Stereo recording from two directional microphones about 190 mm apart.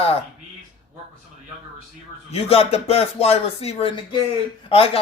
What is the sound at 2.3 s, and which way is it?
Speech, 30° left (ahead or behind).